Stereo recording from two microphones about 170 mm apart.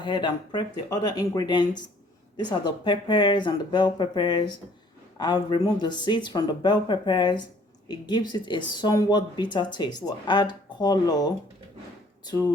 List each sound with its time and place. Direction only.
0.0 s speech: 25° left (ahead or behind)